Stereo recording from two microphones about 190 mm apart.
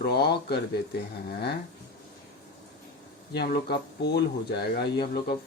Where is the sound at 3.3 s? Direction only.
60° left (ahead or behind).